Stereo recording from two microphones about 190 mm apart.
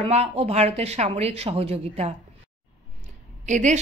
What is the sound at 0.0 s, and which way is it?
Speech, 35° right (ahead or behind).